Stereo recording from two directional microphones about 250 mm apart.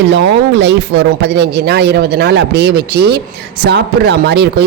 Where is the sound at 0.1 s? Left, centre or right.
Right.